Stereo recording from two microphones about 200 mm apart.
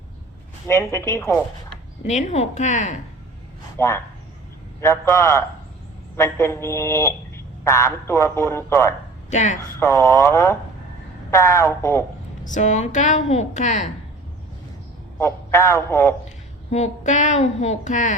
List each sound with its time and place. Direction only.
0.7 s speech: 15° left (ahead or behind)
2.0 s a woman's voice: 35° left (ahead or behind)
3.8 s speech: 15° left (ahead or behind)
9.3 s a woman's voice: 35° left (ahead or behind)
9.8 s speech: 15° left (ahead or behind)
12.5 s a woman's voice: 35° left (ahead or behind)
15.2 s speech: 15° left (ahead or behind)
16.7 s a woman's voice: 35° left (ahead or behind)